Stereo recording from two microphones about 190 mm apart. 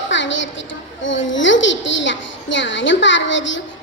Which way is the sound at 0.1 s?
75° left (ahead or behind).